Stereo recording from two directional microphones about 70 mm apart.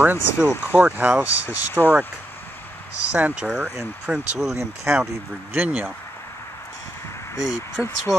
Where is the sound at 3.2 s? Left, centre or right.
Right.